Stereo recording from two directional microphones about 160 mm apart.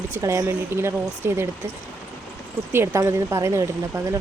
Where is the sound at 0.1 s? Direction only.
20° right (ahead or behind).